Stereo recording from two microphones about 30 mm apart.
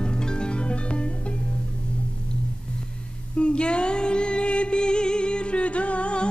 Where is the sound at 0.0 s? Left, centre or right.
Left.